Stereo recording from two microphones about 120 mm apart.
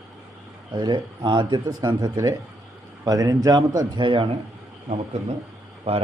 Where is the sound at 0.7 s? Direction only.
40° right (ahead or behind).